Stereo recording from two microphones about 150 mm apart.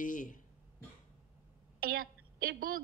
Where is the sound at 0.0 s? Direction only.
60° left (ahead or behind).